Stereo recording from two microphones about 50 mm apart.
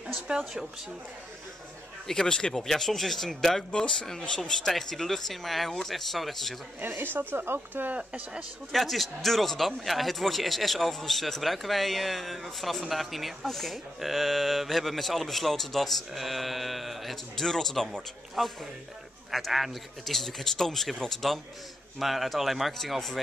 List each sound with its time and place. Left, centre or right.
0.3 s speech: right
2.0 s speech: centre
7.0 s a woman's voice: right
7.8 s speech: right
8.7 s speech: centre